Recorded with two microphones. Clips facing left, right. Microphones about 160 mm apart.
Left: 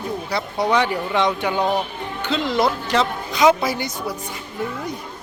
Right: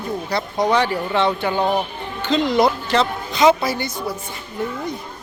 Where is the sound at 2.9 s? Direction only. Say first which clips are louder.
Right 1 dB; 10° left (ahead or behind).